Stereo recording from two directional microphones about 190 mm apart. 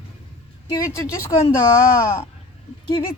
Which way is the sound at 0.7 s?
15° left (ahead or behind).